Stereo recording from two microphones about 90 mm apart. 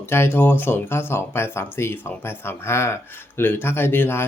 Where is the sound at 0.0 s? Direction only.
25° left (ahead or behind).